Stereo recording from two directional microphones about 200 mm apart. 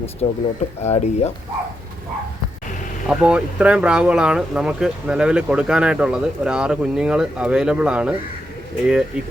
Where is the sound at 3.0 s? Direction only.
5° right (ahead or behind).